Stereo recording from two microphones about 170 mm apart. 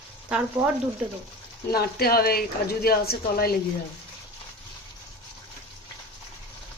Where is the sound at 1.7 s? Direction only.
65° left (ahead or behind).